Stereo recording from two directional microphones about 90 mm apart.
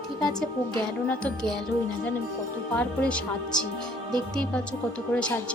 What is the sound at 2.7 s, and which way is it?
Speech, 15° left (ahead or behind).